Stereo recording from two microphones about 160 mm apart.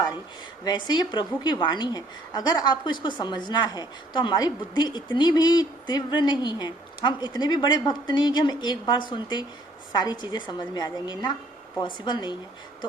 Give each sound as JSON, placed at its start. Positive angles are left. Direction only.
{"t": 0.6, "sound": "a woman's voice", "side_deg": 25}